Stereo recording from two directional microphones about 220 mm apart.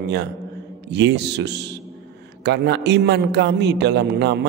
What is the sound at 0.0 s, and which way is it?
A man's voice, 50° right (ahead or behind).